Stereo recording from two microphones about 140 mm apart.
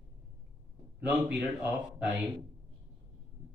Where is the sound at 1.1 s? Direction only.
10° right (ahead or behind).